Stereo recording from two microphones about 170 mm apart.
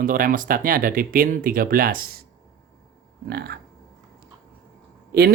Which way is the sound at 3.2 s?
70° right (ahead or behind).